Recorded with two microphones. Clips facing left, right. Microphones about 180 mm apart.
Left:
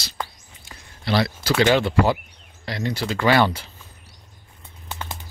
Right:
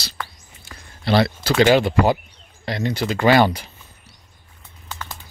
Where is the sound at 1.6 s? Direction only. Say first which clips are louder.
Right 3 dB; 15° right (ahead or behind).